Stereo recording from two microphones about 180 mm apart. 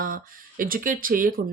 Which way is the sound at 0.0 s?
50° right (ahead or behind).